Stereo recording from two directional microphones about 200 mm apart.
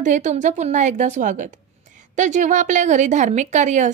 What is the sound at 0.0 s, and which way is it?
Speech, 40° right (ahead or behind).